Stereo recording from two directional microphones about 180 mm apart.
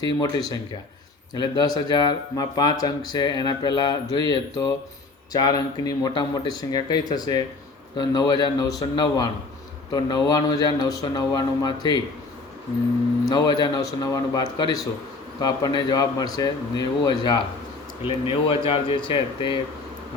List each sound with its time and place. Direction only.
0.0 s speech: 25° left (ahead or behind)
13.2 s speech: 20° left (ahead or behind)